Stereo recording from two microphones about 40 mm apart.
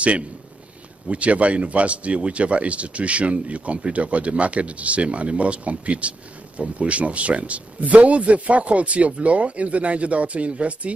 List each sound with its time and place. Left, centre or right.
1.0 s speech: right